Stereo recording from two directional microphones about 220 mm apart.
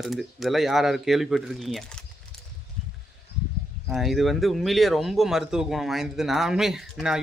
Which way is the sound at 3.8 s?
Centre (ahead or behind).